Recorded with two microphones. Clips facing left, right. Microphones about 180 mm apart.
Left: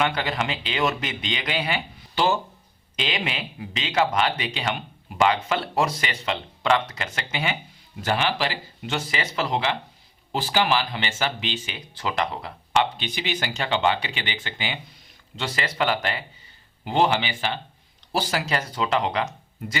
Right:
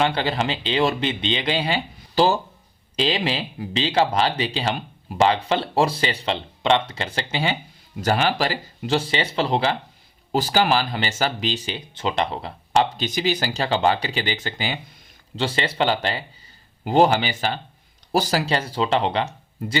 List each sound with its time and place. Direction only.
0.0 s speech: 30° right (ahead or behind)
8.0 s speech: 40° right (ahead or behind)
15.4 s speech: 30° right (ahead or behind)
16.8 s speech: 40° right (ahead or behind)